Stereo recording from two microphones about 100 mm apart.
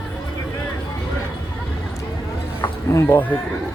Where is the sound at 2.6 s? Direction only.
25° left (ahead or behind).